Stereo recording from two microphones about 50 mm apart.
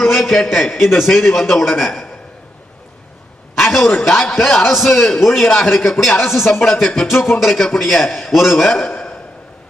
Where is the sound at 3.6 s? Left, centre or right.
Centre.